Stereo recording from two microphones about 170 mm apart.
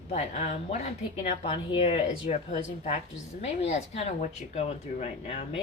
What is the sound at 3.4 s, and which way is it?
Speech, 40° left (ahead or behind).